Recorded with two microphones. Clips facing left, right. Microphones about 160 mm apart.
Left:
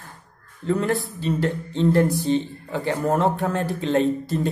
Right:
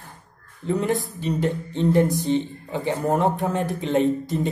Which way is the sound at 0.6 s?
20° right (ahead or behind).